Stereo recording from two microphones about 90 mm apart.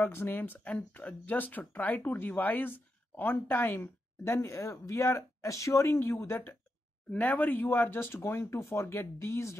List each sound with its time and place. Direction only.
0.0 s speech: 25° left (ahead or behind)